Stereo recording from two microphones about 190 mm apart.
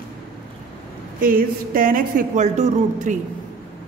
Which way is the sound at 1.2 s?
50° right (ahead or behind).